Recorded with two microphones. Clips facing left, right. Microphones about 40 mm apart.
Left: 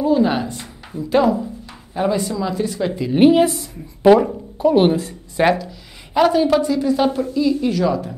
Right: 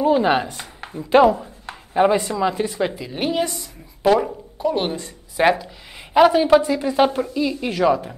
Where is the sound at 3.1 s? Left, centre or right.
Centre.